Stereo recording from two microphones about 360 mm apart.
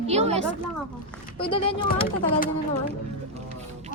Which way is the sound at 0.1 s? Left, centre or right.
Centre.